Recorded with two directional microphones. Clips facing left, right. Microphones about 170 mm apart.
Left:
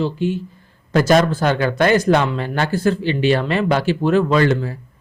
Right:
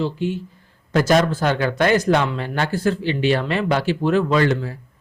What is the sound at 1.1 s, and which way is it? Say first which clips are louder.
Speech: left 2 dB; 40° left (ahead or behind).